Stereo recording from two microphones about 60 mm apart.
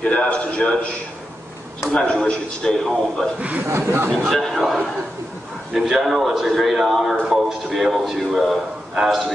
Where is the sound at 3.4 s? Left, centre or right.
Right.